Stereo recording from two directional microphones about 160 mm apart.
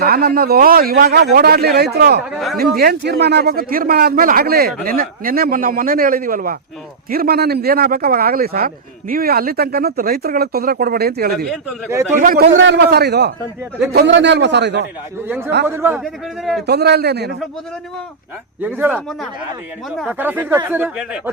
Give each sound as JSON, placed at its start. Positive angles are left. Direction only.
{"t": 0.0, "sound": "a man's voice", "side_deg": -75}
{"t": 15.6, "sound": "speech", "side_deg": -15}
{"t": 16.4, "sound": "a man's voice", "side_deg": 0}
{"t": 16.6, "sound": "a man's voice", "side_deg": -90}
{"t": 18.6, "sound": "speech", "side_deg": -10}
{"t": 20.1, "sound": "speech", "side_deg": -10}
{"t": 20.9, "sound": "a man's voice", "side_deg": -5}